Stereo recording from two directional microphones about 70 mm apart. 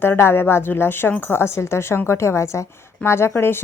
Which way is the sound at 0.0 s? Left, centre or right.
Left.